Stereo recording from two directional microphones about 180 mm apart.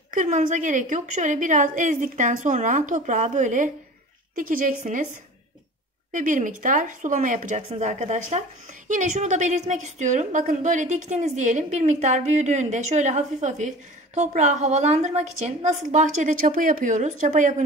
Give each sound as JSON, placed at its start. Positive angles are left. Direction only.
{"t": 0.1, "sound": "speech", "side_deg": -45}
{"t": 6.1, "sound": "a woman's voice", "side_deg": -45}